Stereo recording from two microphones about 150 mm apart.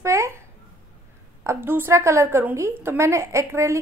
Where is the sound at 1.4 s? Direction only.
15° right (ahead or behind).